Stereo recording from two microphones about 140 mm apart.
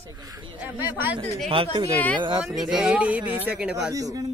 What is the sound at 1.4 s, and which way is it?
Speech, 40° right (ahead or behind).